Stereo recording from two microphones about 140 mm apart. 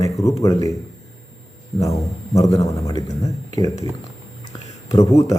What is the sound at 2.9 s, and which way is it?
Speech, 40° left (ahead or behind).